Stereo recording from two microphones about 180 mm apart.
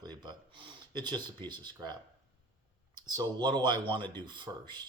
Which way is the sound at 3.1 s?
20° right (ahead or behind).